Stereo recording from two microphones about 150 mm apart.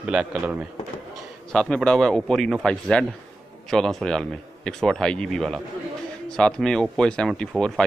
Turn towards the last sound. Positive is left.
turn(degrees=5)  # may be behind; listen again after turning